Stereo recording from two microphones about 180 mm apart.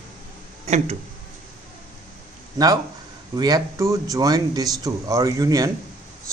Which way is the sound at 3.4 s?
20° right (ahead or behind).